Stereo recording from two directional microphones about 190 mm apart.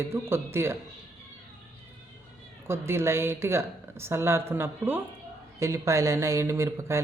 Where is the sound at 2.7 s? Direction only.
15° right (ahead or behind).